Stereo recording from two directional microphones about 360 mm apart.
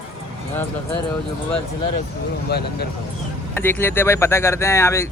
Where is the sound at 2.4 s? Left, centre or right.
Left.